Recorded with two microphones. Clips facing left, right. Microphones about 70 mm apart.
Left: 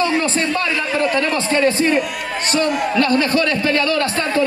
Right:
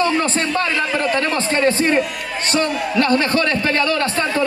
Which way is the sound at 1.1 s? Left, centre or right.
Right.